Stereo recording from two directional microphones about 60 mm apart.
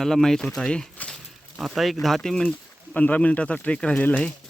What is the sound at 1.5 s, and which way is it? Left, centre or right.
Speech, centre.